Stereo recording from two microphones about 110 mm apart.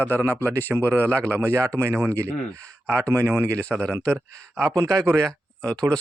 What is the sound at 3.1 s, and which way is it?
Speech, 20° right (ahead or behind).